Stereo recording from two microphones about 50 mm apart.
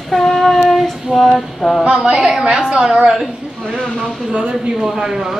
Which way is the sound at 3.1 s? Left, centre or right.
Centre.